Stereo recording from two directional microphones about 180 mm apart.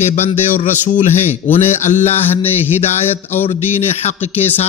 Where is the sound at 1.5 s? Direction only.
40° left (ahead or behind).